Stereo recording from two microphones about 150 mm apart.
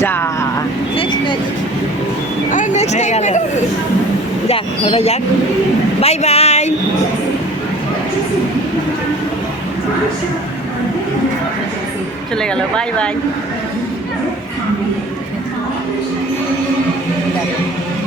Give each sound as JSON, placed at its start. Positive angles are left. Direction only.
{"t": 0.0, "sound": "speech", "side_deg": 15}
{"t": 2.5, "sound": "a sound", "side_deg": 60}
{"t": 4.4, "sound": "speech", "side_deg": 40}
{"t": 12.4, "sound": "speech", "side_deg": 5}